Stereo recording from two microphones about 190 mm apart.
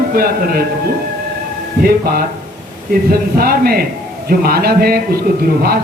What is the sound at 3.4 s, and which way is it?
A man's voice, 50° right (ahead or behind).